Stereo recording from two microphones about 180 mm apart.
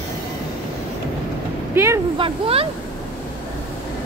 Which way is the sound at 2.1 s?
30° right (ahead or behind).